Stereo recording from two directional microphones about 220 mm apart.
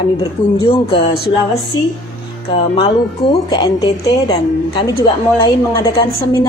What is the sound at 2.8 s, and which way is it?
Speech, 25° left (ahead or behind).